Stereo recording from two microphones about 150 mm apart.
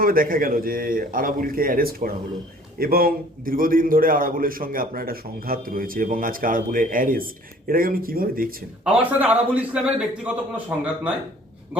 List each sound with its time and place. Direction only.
0.0 s a man's voice: 70° right (ahead or behind)
8.8 s a man's voice: 10° right (ahead or behind)